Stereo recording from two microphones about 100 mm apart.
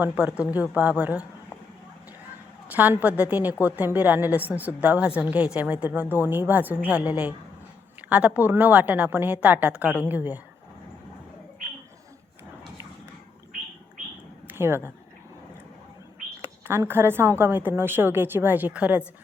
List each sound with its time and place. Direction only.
0.0 s a woman's voice: 10° right (ahead or behind)
2.7 s a woman's voice: 15° right (ahead or behind)
14.4 s a sound: 20° right (ahead or behind)
16.4 s a woman's voice: 25° right (ahead or behind)